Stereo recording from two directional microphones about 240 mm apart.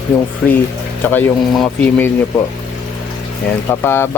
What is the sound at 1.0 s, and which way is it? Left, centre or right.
Speech, centre.